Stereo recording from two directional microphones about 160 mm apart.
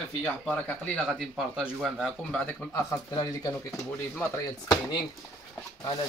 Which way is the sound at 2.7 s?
20° left (ahead or behind).